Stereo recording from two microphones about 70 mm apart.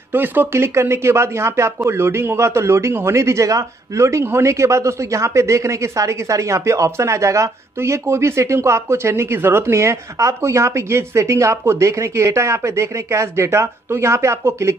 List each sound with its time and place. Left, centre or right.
0.1 s speech: right
0.5 s speech: right